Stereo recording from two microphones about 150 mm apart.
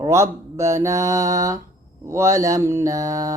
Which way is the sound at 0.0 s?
20° right (ahead or behind).